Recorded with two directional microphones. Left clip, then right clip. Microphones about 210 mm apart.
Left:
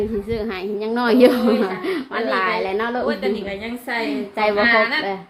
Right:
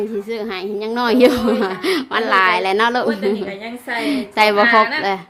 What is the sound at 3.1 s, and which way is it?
Speech, 5° left (ahead or behind).